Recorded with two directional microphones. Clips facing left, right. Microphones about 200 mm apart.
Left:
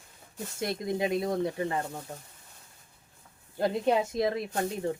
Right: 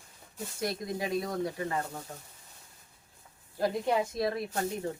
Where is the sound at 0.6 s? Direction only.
25° left (ahead or behind).